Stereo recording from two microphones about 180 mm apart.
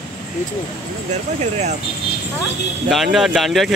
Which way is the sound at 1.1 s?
40° right (ahead or behind).